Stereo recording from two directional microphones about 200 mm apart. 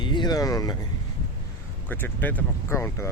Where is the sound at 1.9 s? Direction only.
10° left (ahead or behind).